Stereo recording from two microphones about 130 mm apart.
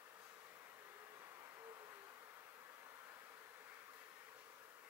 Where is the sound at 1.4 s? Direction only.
20° right (ahead or behind).